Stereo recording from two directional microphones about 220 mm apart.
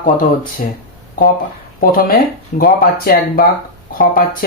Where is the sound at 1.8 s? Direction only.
40° left (ahead or behind).